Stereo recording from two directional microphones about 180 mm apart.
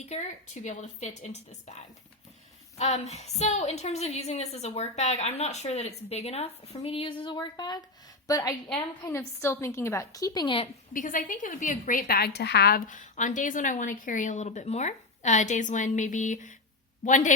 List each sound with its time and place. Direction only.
0.0 s a woman's voice: 40° left (ahead or behind)
2.7 s a woman's voice: 40° left (ahead or behind)
10.9 s a woman's voice: 50° left (ahead or behind)